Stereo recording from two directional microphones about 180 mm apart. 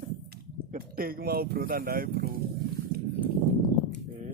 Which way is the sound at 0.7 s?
55° right (ahead or behind).